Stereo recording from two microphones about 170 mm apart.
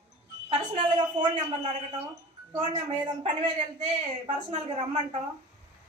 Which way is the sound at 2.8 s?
30° right (ahead or behind).